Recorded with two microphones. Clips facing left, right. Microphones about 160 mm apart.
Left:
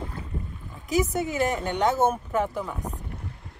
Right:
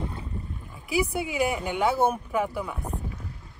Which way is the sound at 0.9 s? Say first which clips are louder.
Left 1 dB; 10° right (ahead or behind).